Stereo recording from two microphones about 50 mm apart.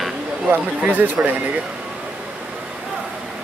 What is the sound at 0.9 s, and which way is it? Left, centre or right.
Speech, right.